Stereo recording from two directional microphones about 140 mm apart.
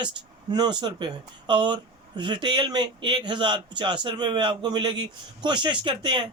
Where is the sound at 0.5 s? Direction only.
30° right (ahead or behind).